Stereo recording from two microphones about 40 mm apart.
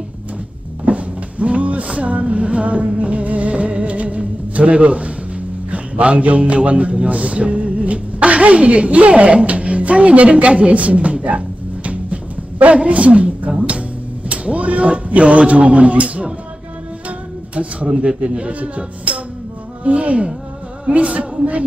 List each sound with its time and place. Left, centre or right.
0.8 s music: right
3.0 s a man's voice: right
11.2 s music: right
14.3 s a man's voice: right
17.8 s a man's voice: right
19.1 s music: right
19.8 s a man's voice: right